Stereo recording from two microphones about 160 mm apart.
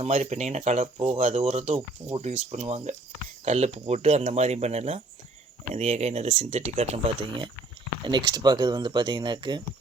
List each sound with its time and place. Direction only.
0.0 s speech: 45° right (ahead or behind); by 9.6 s 30° right (ahead or behind)